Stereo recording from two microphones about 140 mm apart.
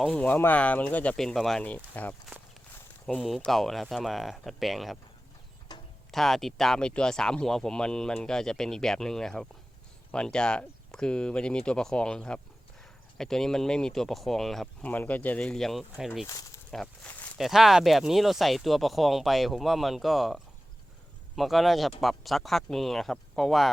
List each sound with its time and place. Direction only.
0.1 s speech: 10° left (ahead or behind)
3.2 s speech: centre (ahead or behind)
5.7 s a sound: 30° left (ahead or behind)
6.1 s speech: centre (ahead or behind)
16.2 s speech: 25° left (ahead or behind)
16.7 s speech: 5° left (ahead or behind)
17.3 s speech: centre (ahead or behind)